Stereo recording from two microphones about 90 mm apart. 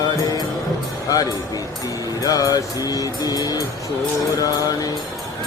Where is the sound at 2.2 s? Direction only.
45° left (ahead or behind).